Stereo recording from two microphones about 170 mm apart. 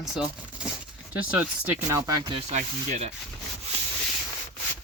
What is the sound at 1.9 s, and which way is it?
Speech, 20° right (ahead or behind).